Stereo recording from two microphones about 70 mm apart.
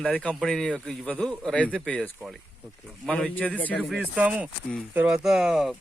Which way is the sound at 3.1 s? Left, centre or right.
Centre.